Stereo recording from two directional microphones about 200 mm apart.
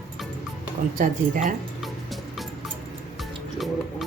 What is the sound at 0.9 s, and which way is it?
Speech, 40° right (ahead or behind).